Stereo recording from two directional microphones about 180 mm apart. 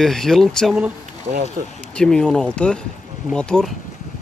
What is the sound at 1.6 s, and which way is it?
Speech, 55° right (ahead or behind).